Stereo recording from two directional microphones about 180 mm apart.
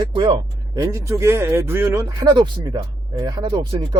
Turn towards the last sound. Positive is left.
turn(degrees=-25)  # may be behind; listen again after turning